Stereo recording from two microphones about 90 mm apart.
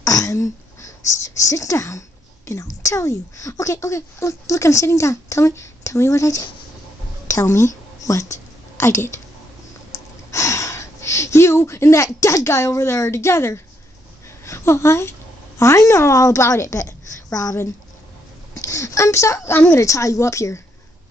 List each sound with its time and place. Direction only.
0.0 s a woman's voice: 35° left (ahead or behind)
18.7 s speech: 35° left (ahead or behind)
19.5 s a woman's voice: 20° left (ahead or behind)
19.8 s speech: 35° left (ahead or behind)